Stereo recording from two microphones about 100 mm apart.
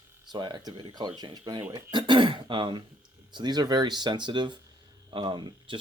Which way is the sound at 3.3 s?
45° right (ahead or behind).